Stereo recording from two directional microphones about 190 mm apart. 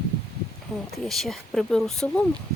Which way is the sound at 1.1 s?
Centre (ahead or behind).